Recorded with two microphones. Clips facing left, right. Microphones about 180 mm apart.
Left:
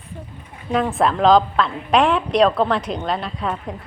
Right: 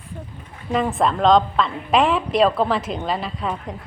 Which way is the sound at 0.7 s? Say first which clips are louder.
Left 1 dB; centre (ahead or behind).